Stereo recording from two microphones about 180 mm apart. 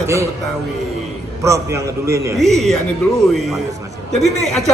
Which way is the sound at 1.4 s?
15° right (ahead or behind).